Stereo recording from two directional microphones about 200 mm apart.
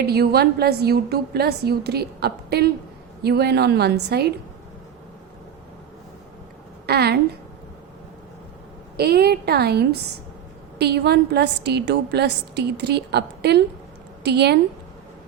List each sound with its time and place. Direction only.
0.0 s a woman's voice: 50° right (ahead or behind)
6.8 s a woman's voice: 55° right (ahead or behind)
9.0 s a woman's voice: 50° right (ahead or behind)